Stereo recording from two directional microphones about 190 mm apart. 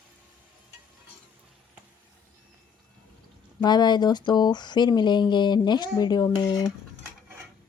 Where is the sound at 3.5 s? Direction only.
20° left (ahead or behind).